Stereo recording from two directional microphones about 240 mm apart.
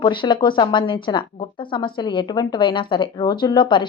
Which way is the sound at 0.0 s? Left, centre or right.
Centre.